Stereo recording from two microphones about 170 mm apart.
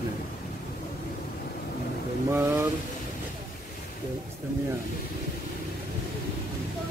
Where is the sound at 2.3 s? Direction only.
15° right (ahead or behind).